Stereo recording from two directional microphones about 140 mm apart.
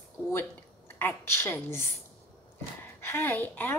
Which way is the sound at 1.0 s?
15° left (ahead or behind).